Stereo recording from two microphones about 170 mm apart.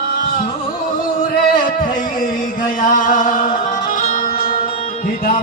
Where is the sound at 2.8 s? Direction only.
55° left (ahead or behind).